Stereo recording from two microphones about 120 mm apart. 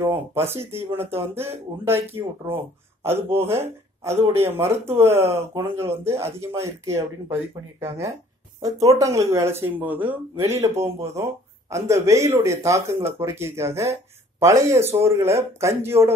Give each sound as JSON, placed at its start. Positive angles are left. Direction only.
{"t": 0.4, "sound": "speech", "side_deg": -20}
{"t": 8.5, "sound": "speech", "side_deg": -30}